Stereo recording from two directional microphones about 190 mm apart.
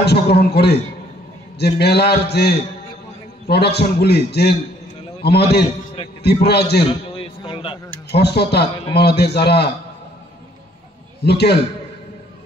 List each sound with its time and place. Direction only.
0.0 s a man's voice: 60° left (ahead or behind)
6.8 s a sound: 25° left (ahead or behind)
8.1 s a man's voice: 60° left (ahead or behind)
11.2 s a man's voice: 60° left (ahead or behind)